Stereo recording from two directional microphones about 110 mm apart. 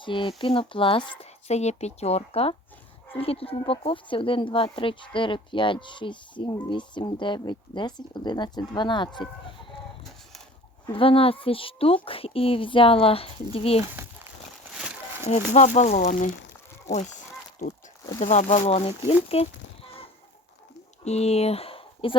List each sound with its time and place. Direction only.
0.0 s speech: 50° left (ahead or behind)
1.2 s speech: 85° left; by 9.2 s 45° left (ahead or behind)
10.9 s speech: 55° left (ahead or behind)
14.7 s a sound: 5° right (ahead or behind)
15.3 s speech: 90° left
18.2 s speech: 90° left; by 19.5 s 65° left (ahead or behind)
21.0 s speech: 80° left; by 22.2 s 55° left (ahead or behind)